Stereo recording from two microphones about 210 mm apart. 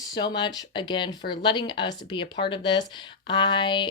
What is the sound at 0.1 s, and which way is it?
Speech, 20° left (ahead or behind).